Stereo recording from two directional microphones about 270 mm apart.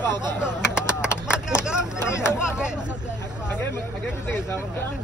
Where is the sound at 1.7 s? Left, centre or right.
Centre.